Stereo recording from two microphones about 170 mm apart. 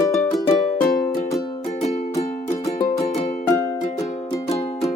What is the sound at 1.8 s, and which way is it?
Music, 40° left (ahead or behind).